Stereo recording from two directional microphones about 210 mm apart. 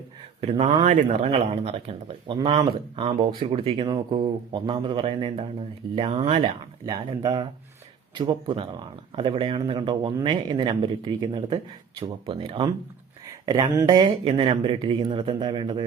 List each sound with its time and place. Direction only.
0.4 s speech: 25° right (ahead or behind)